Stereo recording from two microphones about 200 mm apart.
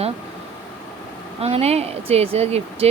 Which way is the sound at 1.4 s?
30° right (ahead or behind).